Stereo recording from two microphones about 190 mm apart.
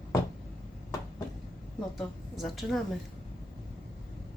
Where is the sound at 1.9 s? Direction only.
Centre (ahead or behind).